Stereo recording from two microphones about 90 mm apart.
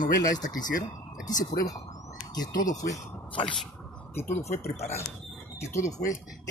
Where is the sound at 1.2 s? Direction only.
40° left (ahead or behind).